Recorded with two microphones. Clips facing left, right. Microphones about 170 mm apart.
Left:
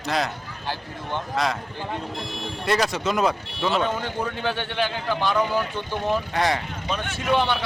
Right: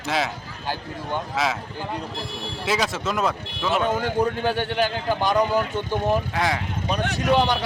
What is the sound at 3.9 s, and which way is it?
Speech, 40° right (ahead or behind).